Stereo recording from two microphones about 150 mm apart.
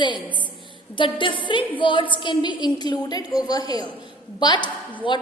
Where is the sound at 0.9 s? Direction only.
35° left (ahead or behind).